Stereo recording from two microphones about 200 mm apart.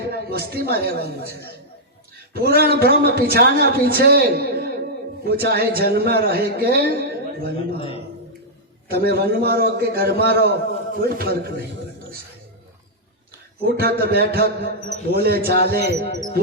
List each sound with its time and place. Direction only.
0.1 s a man's voice: 50° right (ahead or behind)
8.9 s a man's voice: 50° right (ahead or behind)
13.6 s a man's voice: 50° right (ahead or behind)